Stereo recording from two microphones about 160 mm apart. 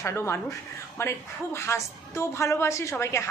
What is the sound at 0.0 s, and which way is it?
A woman's voice, 15° left (ahead or behind).